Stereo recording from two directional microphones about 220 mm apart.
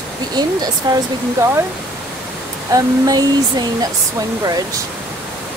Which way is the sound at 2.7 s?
15° right (ahead or behind).